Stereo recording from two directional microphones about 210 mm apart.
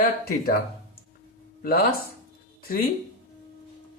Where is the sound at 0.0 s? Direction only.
45° left (ahead or behind).